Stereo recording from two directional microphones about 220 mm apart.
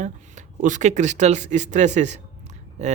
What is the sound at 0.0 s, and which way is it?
Speech, 35° right (ahead or behind).